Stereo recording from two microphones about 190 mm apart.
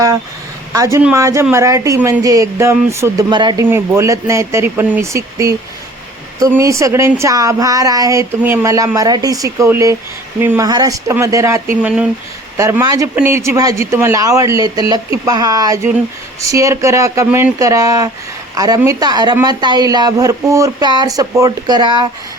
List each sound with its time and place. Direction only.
0.7 s a woman's voice: 15° right (ahead or behind)
11.8 s speech: 5° right (ahead or behind)
12.5 s a woman's voice: 15° right (ahead or behind)